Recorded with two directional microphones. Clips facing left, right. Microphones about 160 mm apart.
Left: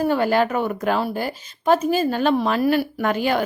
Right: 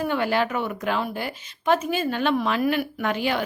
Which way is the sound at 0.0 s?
40° left (ahead or behind).